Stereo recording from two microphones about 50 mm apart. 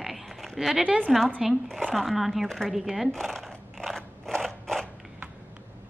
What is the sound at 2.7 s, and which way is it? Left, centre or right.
Speech, centre.